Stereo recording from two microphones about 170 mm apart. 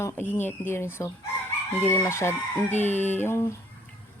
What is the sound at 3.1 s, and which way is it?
Speech, 15° left (ahead or behind).